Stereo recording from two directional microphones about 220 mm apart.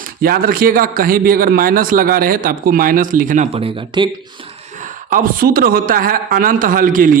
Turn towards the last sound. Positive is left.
turn(degrees=-40)  # may be behind; listen again after turning